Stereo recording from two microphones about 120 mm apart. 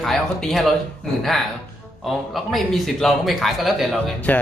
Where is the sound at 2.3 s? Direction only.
Centre (ahead or behind).